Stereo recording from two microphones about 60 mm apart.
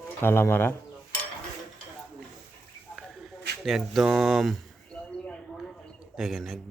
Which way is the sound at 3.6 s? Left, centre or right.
Centre.